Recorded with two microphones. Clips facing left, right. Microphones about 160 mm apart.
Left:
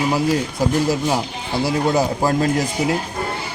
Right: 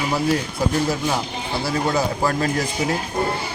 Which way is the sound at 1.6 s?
15° left (ahead or behind).